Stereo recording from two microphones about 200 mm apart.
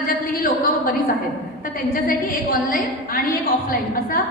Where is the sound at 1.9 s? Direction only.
45° left (ahead or behind).